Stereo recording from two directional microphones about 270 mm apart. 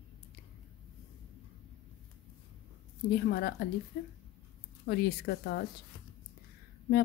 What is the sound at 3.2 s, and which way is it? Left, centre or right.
Speech, left.